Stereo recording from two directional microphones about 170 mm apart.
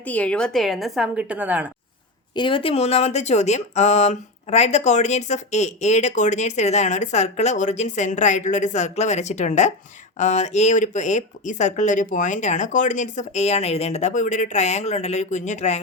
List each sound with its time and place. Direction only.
0.0 s a woman's voice: 10° left (ahead or behind); by 1.6 s 10° right (ahead or behind)
2.3 s speech: 30° left (ahead or behind)